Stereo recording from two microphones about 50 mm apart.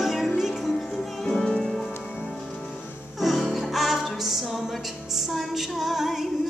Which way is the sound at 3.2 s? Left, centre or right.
Centre.